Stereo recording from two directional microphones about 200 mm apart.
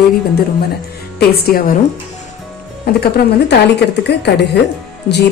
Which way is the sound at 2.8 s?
55° left (ahead or behind).